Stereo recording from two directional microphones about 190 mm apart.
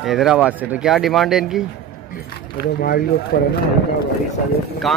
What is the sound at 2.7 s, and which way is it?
Speech, 55° left (ahead or behind).